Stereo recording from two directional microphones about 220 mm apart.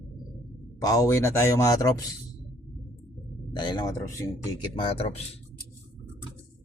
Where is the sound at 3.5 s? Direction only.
20° left (ahead or behind).